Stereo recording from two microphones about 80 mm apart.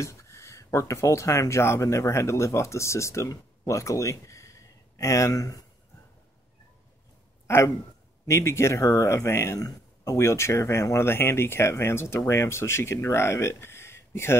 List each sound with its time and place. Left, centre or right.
0.0 s speech: left
8.3 s speech: left